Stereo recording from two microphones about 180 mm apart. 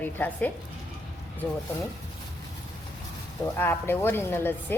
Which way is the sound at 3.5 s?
10° left (ahead or behind).